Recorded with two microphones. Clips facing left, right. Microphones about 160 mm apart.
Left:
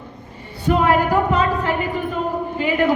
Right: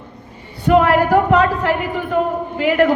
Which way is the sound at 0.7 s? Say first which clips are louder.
Right 4 dB; 70° right (ahead or behind).